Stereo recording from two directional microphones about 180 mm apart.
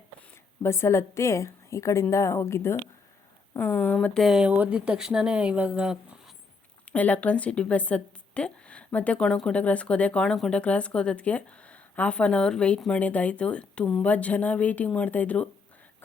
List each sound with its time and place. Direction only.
0.2 s a woman's voice: 15° left (ahead or behind); by 6.3 s 5° right (ahead or behind)
6.8 s a woman's voice: 10° left (ahead or behind)